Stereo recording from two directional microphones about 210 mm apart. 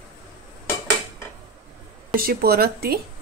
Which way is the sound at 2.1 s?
45° right (ahead or behind).